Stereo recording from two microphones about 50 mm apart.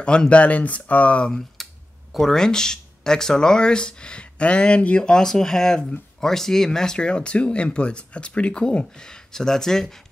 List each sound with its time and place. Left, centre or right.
0.0 s speech: centre
1.6 s a sound: centre
2.1 s speech: centre